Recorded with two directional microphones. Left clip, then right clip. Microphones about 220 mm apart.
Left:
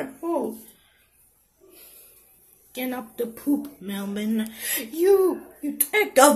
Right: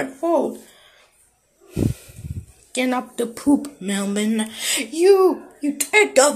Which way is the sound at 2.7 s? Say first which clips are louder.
Right 9 dB; 25° right (ahead or behind).